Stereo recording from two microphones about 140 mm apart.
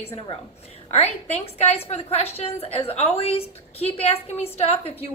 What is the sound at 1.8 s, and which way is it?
A woman's voice, 45° left (ahead or behind).